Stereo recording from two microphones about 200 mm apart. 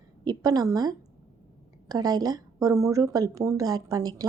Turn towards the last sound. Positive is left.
turn(degrees=-20)  # may be behind; listen again after turning